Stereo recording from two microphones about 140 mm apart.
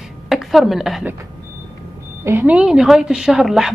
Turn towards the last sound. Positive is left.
turn(degrees=0)  # may be behind; listen again after turning